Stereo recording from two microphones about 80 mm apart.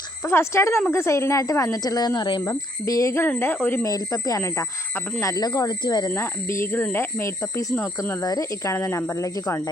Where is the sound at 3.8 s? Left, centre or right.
Left.